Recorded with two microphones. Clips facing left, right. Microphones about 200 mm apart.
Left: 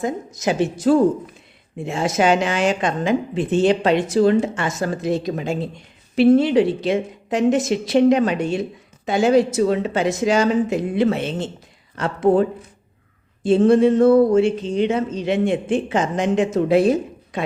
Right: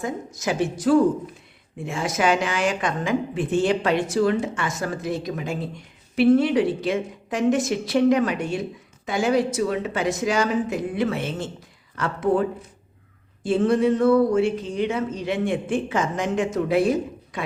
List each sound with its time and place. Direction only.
0.0 s a woman's voice: 20° left (ahead or behind)
13.6 s a woman's voice: 25° left (ahead or behind)